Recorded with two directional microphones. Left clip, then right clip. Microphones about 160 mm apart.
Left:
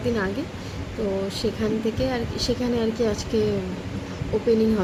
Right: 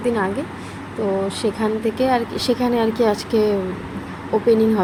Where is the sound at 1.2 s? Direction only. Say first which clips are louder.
Right 5 dB; 15° right (ahead or behind).